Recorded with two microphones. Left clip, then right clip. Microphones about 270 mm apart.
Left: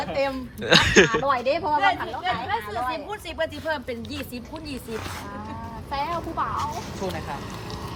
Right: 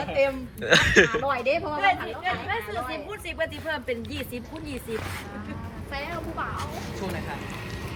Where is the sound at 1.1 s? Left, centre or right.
Left.